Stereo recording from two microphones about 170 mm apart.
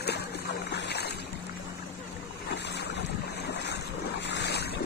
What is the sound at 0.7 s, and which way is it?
Boat, 80° left.